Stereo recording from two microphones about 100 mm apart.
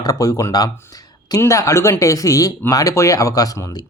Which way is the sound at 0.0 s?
35° left (ahead or behind).